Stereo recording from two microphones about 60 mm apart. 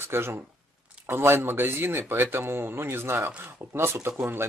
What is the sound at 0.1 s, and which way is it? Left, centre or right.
Speech, right.